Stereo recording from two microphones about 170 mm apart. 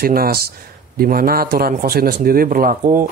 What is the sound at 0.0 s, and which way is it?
Speech, 65° right (ahead or behind).